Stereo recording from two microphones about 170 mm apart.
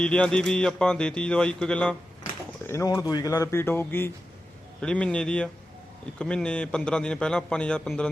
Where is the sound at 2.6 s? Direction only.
15° left (ahead or behind).